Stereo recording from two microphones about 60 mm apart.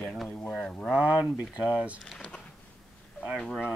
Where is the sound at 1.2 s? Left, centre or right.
Centre.